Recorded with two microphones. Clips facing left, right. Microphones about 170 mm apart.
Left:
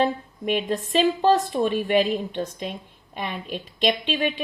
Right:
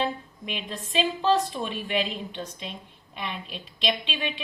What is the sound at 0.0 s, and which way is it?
A woman's voice, 50° left (ahead or behind).